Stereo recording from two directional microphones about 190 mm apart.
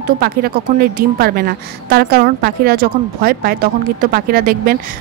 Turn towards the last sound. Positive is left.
turn(degrees=-50)  # may be behind; listen again after turning